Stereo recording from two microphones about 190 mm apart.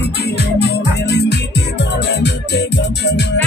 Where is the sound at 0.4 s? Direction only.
60° left (ahead or behind).